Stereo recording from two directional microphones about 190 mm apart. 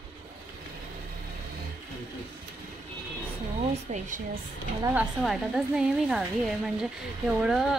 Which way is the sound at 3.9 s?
45° right (ahead or behind).